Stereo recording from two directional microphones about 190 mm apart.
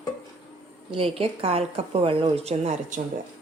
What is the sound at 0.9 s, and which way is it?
A woman's voice, 30° right (ahead or behind).